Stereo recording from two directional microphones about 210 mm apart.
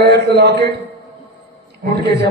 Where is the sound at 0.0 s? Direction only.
50° right (ahead or behind).